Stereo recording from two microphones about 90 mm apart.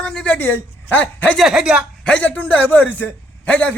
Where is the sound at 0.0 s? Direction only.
10° left (ahead or behind).